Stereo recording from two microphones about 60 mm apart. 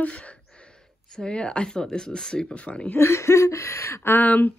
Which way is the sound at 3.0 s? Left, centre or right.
Left.